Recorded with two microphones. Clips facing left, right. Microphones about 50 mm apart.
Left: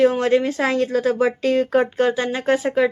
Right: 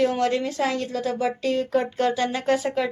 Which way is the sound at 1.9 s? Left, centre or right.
Left.